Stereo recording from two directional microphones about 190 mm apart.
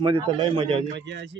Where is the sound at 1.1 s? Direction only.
70° right (ahead or behind).